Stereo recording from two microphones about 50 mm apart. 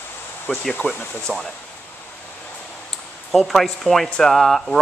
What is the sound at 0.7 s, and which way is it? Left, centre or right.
Speech, left.